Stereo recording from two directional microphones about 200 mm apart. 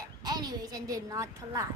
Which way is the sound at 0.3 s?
20° right (ahead or behind).